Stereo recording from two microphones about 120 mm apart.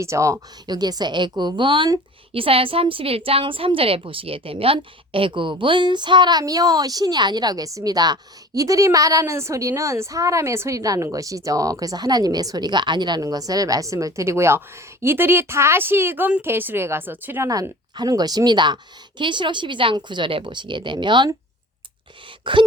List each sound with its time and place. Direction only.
0.0 s speech: 25° right (ahead or behind)
17.5 s speech: 30° right (ahead or behind)
22.5 s speech: 45° right (ahead or behind)